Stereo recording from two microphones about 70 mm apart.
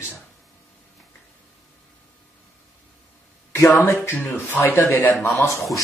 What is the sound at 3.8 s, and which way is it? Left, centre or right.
Speech, left.